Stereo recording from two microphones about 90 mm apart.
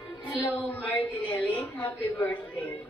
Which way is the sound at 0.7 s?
15° left (ahead or behind).